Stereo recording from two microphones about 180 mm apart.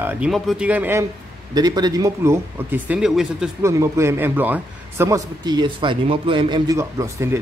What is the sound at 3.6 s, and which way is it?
A man's voice, 15° right (ahead or behind).